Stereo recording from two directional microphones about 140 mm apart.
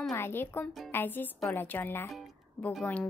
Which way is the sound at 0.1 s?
15° left (ahead or behind).